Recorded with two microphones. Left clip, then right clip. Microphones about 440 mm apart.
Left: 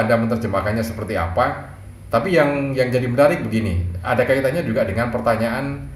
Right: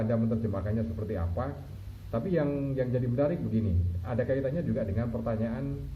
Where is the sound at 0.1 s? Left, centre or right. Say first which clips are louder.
Left 13 dB; centre.